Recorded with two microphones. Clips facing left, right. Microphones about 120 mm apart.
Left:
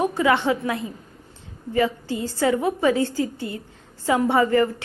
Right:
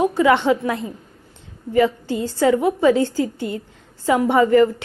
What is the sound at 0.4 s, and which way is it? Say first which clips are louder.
A woman's voice: right 4 dB; 15° left (ahead or behind).